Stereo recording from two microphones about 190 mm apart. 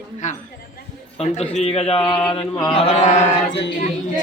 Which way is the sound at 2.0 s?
5° left (ahead or behind).